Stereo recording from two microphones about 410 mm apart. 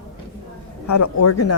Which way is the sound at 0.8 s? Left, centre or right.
Left.